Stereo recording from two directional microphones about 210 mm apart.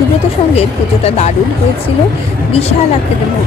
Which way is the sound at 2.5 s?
30° left (ahead or behind).